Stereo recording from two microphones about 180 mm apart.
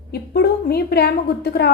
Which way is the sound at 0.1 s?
60° left (ahead or behind).